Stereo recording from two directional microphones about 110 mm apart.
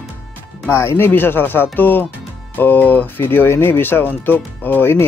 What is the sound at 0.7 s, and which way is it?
Speech, 20° left (ahead or behind).